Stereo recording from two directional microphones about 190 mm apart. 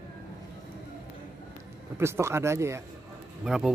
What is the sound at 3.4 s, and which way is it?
Speech, 5° right (ahead or behind).